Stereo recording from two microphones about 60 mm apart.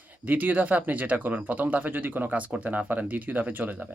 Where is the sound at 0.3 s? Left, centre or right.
Right.